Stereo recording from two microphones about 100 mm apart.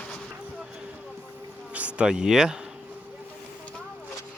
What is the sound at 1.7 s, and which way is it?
Speech, 15° right (ahead or behind).